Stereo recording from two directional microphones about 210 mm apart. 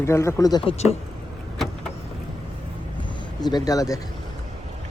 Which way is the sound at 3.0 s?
20° left (ahead or behind).